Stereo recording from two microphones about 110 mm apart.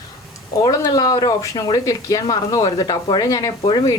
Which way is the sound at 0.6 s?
35° left (ahead or behind).